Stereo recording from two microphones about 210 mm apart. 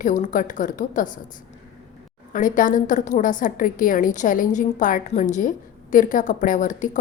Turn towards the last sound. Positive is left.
turn(degrees=35)  # may be behind; listen again after turning